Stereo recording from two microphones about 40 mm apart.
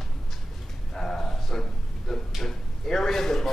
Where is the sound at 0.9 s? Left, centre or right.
Centre.